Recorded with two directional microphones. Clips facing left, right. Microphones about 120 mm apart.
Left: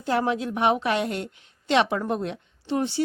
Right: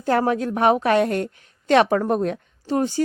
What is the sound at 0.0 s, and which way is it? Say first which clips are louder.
Speech: right 4 dB; 45° right (ahead or behind).